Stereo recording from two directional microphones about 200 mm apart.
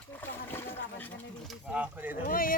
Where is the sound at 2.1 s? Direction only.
45° left (ahead or behind).